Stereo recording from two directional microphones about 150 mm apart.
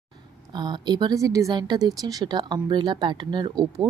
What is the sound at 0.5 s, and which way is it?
A woman's voice, 30° right (ahead or behind).